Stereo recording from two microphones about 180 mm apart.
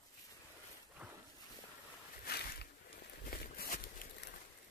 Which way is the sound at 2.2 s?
65° left (ahead or behind).